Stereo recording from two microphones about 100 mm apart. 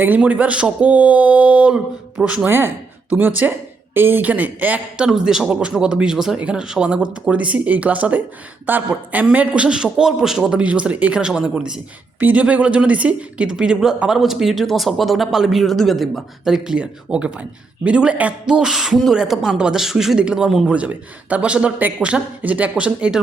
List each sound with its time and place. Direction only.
0.0 s a man's voice: 15° right (ahead or behind)
2.5 s a man's voice: 20° right (ahead or behind)